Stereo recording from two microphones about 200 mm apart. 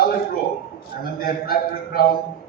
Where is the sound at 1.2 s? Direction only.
50° left (ahead or behind).